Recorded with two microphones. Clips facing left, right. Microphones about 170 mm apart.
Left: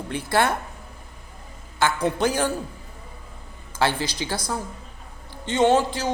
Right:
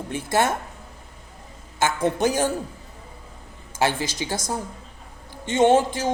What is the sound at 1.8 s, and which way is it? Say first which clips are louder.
Speech: even; 20° right (ahead or behind).